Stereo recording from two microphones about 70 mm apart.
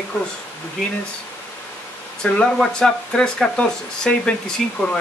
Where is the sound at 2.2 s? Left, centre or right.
Centre.